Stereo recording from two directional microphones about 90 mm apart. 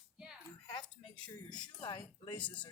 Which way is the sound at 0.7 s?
55° left (ahead or behind).